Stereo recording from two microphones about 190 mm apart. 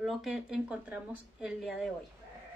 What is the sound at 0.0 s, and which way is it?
A woman's voice, centre (ahead or behind).